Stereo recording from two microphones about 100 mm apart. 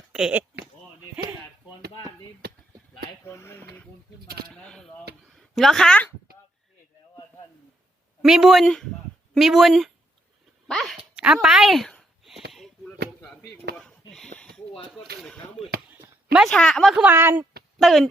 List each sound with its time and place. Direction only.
0.1 s a sound: 5° right (ahead or behind)
3.2 s speech: 30° left (ahead or behind)
4.5 s a woman's voice: 5° left (ahead or behind)
8.2 s speech: 5° right (ahead or behind)
10.9 s a sound: 10° right (ahead or behind)
13.2 s chop: 10° left (ahead or behind)
13.7 s a sound: 5° left (ahead or behind)
14.9 s speech: 5° left (ahead or behind)
16.5 s a woman's voice: 10° left (ahead or behind)
17.1 s speech: 20° right (ahead or behind)
17.7 s speech: centre (ahead or behind)